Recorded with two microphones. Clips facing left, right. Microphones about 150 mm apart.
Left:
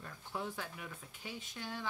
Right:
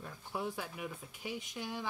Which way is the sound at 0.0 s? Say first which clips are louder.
Right 3 dB; 10° right (ahead or behind).